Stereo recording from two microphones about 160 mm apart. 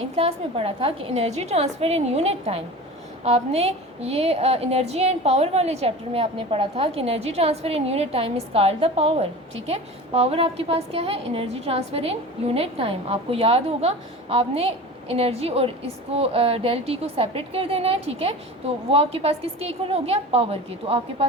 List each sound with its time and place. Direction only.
0.2 s a woman's voice: 35° right (ahead or behind)